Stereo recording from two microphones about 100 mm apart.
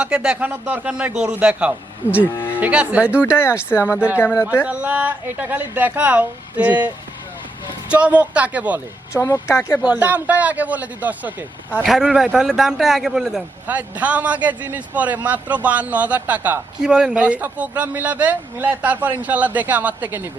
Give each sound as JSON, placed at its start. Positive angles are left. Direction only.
{"t": 0.0, "sound": "speech", "side_deg": -10}
{"t": 3.4, "sound": "speech", "side_deg": 25}
{"t": 3.9, "sound": "speech", "side_deg": -10}
{"t": 4.2, "sound": "speech", "side_deg": 20}
{"t": 4.6, "sound": "speech", "side_deg": -10}
{"t": 9.1, "sound": "speech", "side_deg": 30}
{"t": 9.8, "sound": "a man's voice", "side_deg": -15}